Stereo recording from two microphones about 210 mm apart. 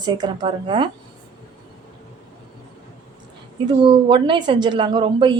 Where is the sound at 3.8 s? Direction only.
25° right (ahead or behind).